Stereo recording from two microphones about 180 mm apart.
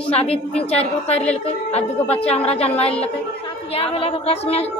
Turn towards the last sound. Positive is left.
turn(degrees=35)  # may be behind; listen again after turning